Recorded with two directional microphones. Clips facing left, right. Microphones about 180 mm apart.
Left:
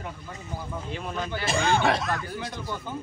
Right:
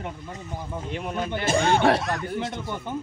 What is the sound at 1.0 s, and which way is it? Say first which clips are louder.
Speech: right 4 dB; 15° right (ahead or behind).